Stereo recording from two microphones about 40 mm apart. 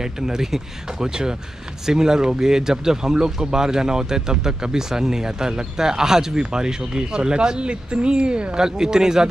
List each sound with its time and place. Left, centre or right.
0.0 s speech: centre